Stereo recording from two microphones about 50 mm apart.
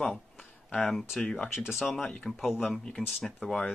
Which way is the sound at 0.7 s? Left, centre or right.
Centre.